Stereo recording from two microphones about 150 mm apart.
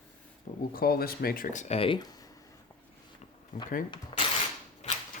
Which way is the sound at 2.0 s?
25° left (ahead or behind).